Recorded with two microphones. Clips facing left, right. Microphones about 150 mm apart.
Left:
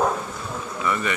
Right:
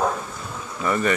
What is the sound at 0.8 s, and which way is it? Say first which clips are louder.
Speech: right 4 dB; 40° right (ahead or behind).